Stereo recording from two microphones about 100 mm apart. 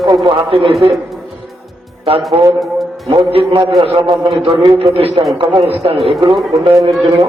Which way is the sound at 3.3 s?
70° right (ahead or behind).